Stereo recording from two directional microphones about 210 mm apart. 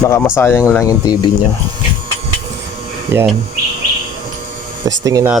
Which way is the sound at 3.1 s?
10° right (ahead or behind).